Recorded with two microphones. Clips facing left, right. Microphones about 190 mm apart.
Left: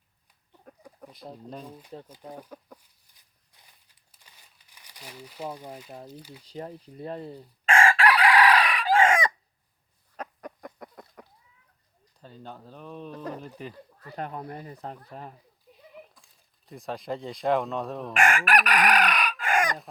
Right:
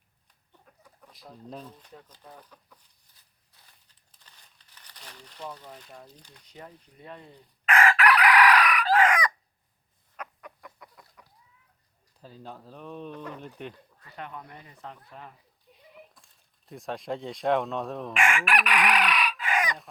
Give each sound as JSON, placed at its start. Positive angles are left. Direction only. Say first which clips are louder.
{"t": 0.7, "sound": "chicken", "louder": "left 11 dB", "side_deg": 45}
{"t": 1.5, "sound": "speech", "louder": "right 2 dB", "side_deg": 10}
{"t": 2.2, "sound": "speech", "louder": "left 7 dB", "side_deg": 25}
{"t": 3.2, "sound": "walk", "louder": "even", "side_deg": 15}
{"t": 3.8, "sound": "crumpling", "louder": "left 1 dB", "side_deg": 10}
{"t": 6.1, "sound": "speech", "louder": "left 10 dB", "side_deg": 5}
{"t": 6.4, "sound": "chicken", "louder": "left 8 dB", "side_deg": 30}
{"t": 10.2, "sound": "chicken", "louder": "left 4 dB", "side_deg": 40}
{"t": 12.2, "sound": "speech", "louder": "even", "side_deg": 0}
{"t": 14.0, "sound": "speech", "louder": "left 6 dB", "side_deg": 40}
{"t": 16.1, "sound": "speech", "louder": "even", "side_deg": 0}
{"t": 18.1, "sound": "chicken", "louder": "left 3 dB", "side_deg": 40}